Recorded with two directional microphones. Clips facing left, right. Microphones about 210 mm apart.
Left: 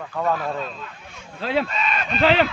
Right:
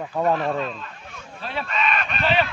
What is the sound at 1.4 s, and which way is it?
Speech, 90° left.